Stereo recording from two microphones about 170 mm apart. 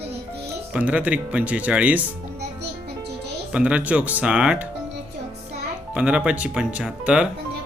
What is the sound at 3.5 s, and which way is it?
Speech, 5° right (ahead or behind).